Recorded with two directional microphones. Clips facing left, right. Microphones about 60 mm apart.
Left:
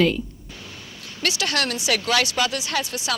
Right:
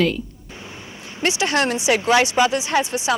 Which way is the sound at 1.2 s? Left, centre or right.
Right.